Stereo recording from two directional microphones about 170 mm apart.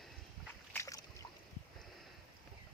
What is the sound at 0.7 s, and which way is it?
Boat, 20° left (ahead or behind).